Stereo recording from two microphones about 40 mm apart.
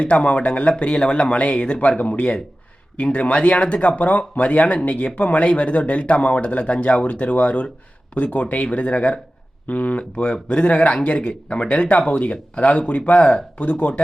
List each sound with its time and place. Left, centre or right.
0.0 s speech: left
2.0 s speech: left
3.0 s speech: left
10.0 s speech: left